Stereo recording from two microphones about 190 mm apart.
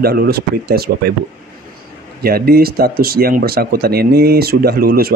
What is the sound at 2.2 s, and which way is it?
Speech, 55° right (ahead or behind).